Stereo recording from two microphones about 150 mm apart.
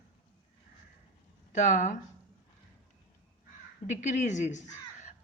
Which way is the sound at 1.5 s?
55° left (ahead or behind).